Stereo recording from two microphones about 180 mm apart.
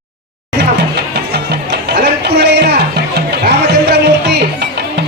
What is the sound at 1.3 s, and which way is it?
Music, 65° right (ahead or behind).